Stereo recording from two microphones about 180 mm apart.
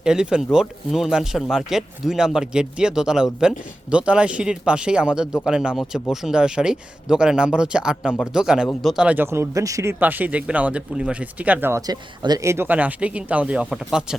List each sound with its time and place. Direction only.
0.0 s speech: 5° right (ahead or behind)